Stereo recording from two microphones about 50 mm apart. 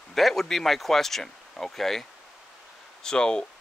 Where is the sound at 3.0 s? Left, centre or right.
Centre.